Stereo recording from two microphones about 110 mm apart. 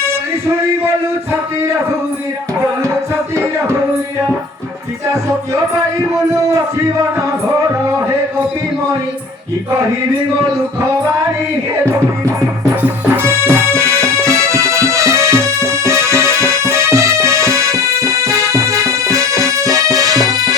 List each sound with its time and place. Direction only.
12.8 s music: 20° right (ahead or behind)